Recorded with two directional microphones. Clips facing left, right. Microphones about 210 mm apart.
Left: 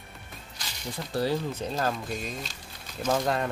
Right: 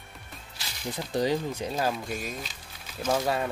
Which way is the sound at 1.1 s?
15° right (ahead or behind).